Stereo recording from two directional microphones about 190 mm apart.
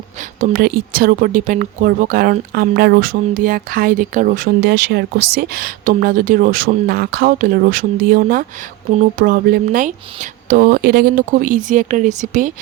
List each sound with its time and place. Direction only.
0.3 s speech: 45° right (ahead or behind)